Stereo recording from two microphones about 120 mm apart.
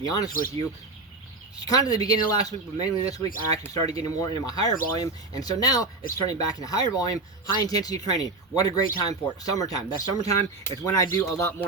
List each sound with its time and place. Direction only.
0.0 s speech: 30° left (ahead or behind)